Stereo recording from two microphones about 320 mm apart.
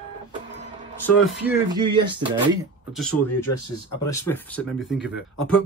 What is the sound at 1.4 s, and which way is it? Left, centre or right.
Speech, centre.